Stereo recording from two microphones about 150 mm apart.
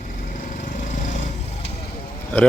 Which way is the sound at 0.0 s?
65° left (ahead or behind).